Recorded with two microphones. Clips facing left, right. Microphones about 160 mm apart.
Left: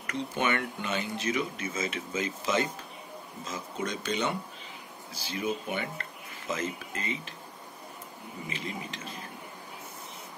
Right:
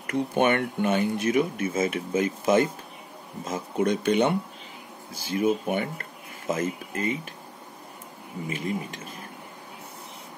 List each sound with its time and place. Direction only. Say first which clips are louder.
0.1 s speech: right 7 dB; 55° right (ahead or behind)
8.5 s speech: right 8 dB; 50° right (ahead or behind)